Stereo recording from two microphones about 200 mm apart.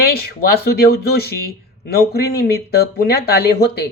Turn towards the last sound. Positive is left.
turn(degrees=55)  # may be behind; listen again after turning